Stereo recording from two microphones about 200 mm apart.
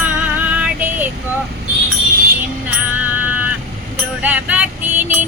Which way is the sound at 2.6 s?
10° right (ahead or behind).